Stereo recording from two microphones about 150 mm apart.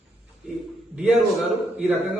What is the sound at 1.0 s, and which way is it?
A man's voice, 10° right (ahead or behind).